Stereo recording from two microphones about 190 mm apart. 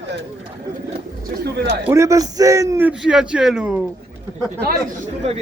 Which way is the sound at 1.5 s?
60° right (ahead or behind).